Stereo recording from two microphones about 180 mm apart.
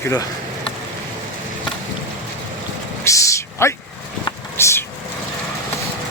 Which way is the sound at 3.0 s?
15° left (ahead or behind).